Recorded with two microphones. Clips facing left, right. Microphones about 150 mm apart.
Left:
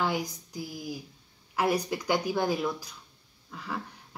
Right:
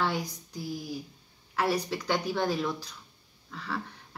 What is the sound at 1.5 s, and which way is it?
Speech, 10° left (ahead or behind).